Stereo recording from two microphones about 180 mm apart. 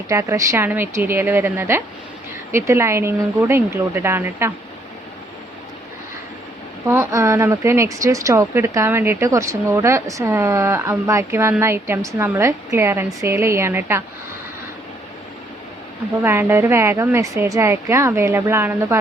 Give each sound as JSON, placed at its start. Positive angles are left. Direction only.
{"t": 0.1, "sound": "speech", "side_deg": -15}
{"t": 6.8, "sound": "speech", "side_deg": -15}
{"t": 16.2, "sound": "speech", "side_deg": -15}